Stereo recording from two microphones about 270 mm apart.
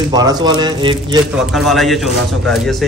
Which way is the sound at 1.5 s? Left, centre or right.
Centre.